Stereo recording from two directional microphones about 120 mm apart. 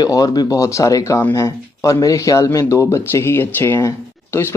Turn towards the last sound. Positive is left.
turn(degrees=20)  # may be behind; listen again after turning